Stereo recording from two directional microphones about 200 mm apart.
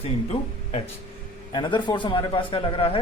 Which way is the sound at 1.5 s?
20° left (ahead or behind).